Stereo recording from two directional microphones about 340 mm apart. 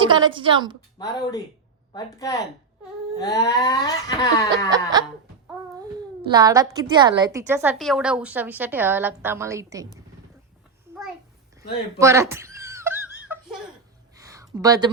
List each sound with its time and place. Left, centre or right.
0.0 s a child's voice: centre
0.9 s whimper: centre
4.7 s a child's voice: centre
11.9 s giggle: centre
14.2 s a sound: centre